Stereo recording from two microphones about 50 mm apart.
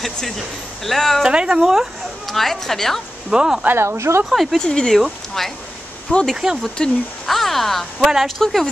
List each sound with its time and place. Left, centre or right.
0.8 s speech: centre
1.3 s speech: centre
1.6 s speech: centre
2.2 s speech: centre
3.3 s speech: centre
3.7 s speech: right
4.3 s speech: centre
4.6 s speech: centre
6.1 s speech: left
7.2 s speech: centre